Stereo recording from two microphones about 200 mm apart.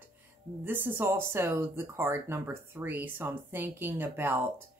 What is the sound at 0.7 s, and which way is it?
Speech, 10° right (ahead or behind).